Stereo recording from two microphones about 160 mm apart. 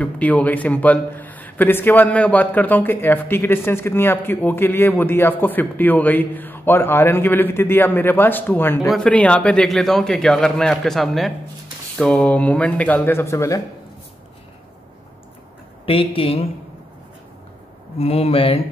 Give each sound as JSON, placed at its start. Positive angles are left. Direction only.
{"t": 0.0, "sound": "a man's voice", "side_deg": 10}
{"t": 15.8, "sound": "speech", "side_deg": 35}
{"t": 17.9, "sound": "speech", "side_deg": 40}